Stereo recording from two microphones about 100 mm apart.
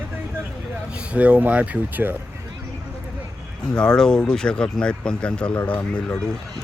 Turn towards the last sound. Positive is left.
turn(degrees=10)  # may be behind; listen again after turning